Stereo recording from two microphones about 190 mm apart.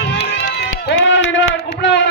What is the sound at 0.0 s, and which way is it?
Run, 60° left (ahead or behind).